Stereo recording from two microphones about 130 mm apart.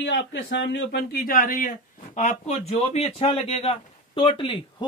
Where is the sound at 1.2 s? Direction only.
90° left.